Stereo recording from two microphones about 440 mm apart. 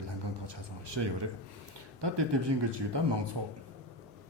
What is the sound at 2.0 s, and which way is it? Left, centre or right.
Speech, right.